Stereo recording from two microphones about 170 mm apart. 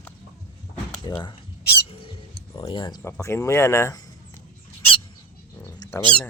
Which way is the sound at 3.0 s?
15° left (ahead or behind).